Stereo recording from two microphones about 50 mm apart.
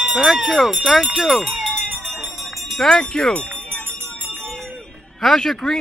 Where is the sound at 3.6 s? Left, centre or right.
Left.